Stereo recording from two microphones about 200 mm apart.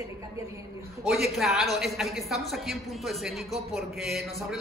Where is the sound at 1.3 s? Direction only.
Centre (ahead or behind).